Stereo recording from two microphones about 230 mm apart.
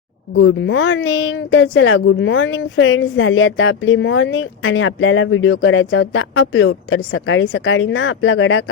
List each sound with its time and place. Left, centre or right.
0.3 s speech: left